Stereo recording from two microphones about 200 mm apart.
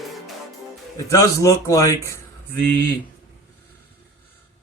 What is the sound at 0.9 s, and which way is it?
A man's voice, 15° left (ahead or behind).